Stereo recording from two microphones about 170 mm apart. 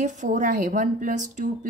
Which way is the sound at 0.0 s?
45° right (ahead or behind).